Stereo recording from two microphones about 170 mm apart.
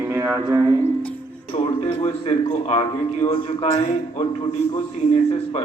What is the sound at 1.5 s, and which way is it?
A man's voice, 35° left (ahead or behind).